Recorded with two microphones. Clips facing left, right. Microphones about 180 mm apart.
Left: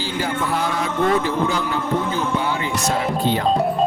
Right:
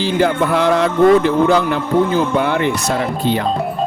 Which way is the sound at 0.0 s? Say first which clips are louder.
Right 8 dB; 65° right (ahead or behind).